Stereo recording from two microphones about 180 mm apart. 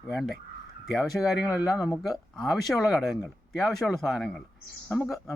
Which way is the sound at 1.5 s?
20° left (ahead or behind).